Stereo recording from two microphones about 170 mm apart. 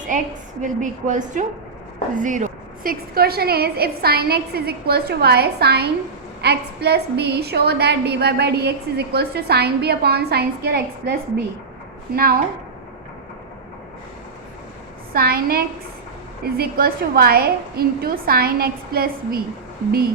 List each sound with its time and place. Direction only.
0.6 s a woman's voice: 50° right (ahead or behind)
15.1 s a woman's voice: 65° right (ahead or behind)